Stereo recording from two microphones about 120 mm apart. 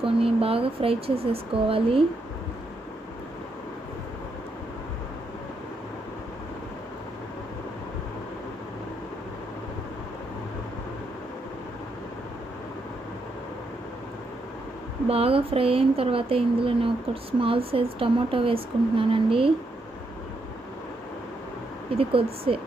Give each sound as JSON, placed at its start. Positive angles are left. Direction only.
{"t": 0.0, "sound": "speech", "side_deg": -50}
{"t": 15.1, "sound": "speech", "side_deg": -55}
{"t": 21.9, "sound": "speech", "side_deg": -50}